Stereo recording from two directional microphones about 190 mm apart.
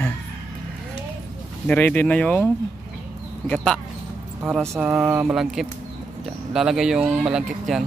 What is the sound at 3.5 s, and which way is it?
Speech, 5° left (ahead or behind).